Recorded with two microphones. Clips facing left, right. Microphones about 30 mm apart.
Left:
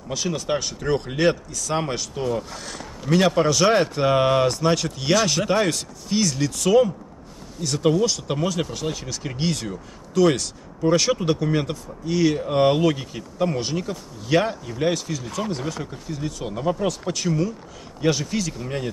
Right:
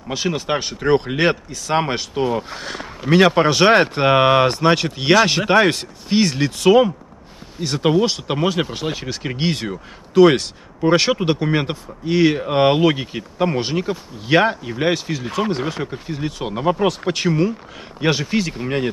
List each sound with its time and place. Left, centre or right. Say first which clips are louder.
0.1 s speech: right 3 dB; right